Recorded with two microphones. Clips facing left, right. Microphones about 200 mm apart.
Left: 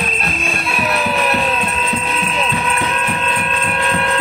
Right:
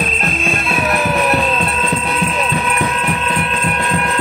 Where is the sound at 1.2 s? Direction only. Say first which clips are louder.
Right 2 dB; centre (ahead or behind).